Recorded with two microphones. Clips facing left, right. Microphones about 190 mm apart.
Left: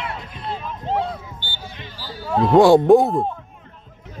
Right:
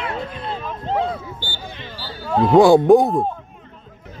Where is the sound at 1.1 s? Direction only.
90° right.